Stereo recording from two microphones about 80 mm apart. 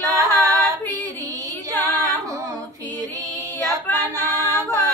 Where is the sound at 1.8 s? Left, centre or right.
Right.